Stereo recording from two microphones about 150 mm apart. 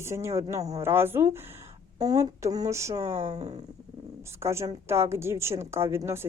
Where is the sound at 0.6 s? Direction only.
45° right (ahead or behind).